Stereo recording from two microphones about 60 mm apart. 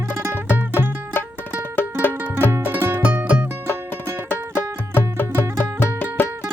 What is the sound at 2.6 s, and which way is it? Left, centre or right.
Music, right.